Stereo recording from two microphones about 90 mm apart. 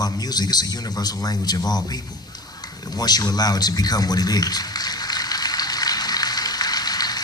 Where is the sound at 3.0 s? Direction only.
45° left (ahead or behind).